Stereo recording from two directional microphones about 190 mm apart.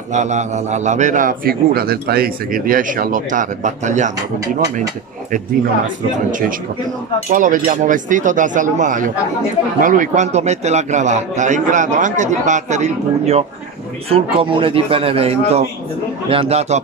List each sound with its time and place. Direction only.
0.1 s a man's voice: 40° right (ahead or behind)
7.2 s a man's voice: 45° right (ahead or behind)